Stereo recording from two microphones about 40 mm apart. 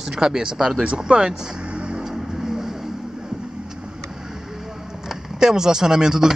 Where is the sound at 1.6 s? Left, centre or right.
Right.